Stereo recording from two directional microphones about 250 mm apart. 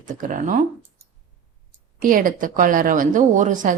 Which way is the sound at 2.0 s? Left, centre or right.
Right.